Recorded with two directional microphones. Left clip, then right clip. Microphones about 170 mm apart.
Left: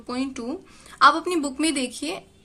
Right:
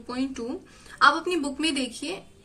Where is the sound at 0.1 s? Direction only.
35° left (ahead or behind).